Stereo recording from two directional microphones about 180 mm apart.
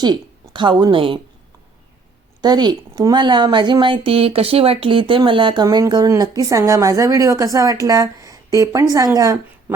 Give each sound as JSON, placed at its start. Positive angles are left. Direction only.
{"t": 0.0, "sound": "a woman's voice", "side_deg": -25}
{"t": 2.4, "sound": "a woman's voice", "side_deg": -25}